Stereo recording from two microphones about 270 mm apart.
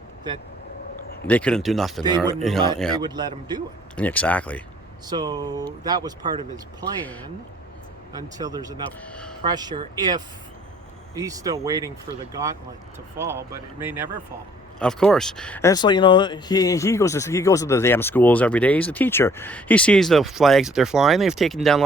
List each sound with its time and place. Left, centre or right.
1.3 s speech: centre
2.0 s speech: centre
2.4 s speech: centre
3.0 s speech: centre
3.9 s speech: centre
5.0 s speech: centre
8.1 s speech: centre
13.1 s speech: centre